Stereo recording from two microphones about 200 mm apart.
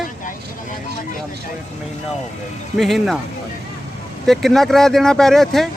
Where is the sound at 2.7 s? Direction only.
Centre (ahead or behind).